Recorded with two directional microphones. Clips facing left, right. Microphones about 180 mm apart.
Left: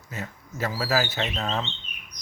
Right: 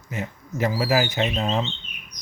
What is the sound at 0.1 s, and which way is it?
Speech, 15° right (ahead or behind).